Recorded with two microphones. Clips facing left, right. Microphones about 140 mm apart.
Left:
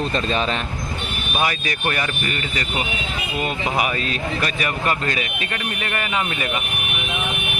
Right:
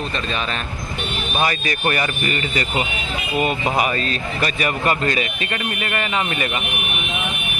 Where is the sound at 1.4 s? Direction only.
5° left (ahead or behind).